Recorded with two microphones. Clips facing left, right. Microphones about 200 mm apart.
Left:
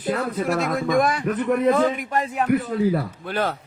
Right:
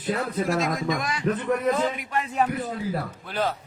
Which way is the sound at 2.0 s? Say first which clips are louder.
Left 4 dB; 40° left (ahead or behind).